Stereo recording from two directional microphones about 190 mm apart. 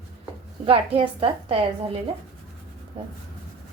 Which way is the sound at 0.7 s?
30° right (ahead or behind).